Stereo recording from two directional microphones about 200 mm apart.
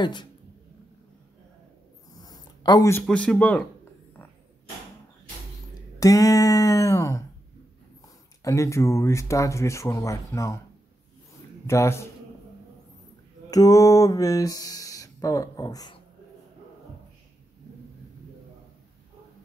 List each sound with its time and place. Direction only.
0.0 s speech: 20° left (ahead or behind)
2.2 s speech: 20° left (ahead or behind)
5.9 s speech: 15° left (ahead or behind)
8.4 s speech: 15° left (ahead or behind)
11.6 s speech: 15° left (ahead or behind)
13.5 s speech: 15° left (ahead or behind)